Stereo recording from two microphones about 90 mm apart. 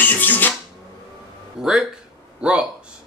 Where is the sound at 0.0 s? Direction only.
20° left (ahead or behind).